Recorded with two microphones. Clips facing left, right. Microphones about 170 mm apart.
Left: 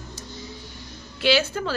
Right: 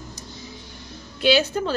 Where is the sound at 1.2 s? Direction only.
15° right (ahead or behind).